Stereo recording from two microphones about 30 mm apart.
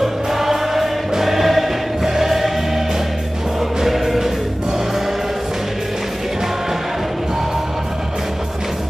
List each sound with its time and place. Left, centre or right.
0.0 s choir: centre
3.8 s music: centre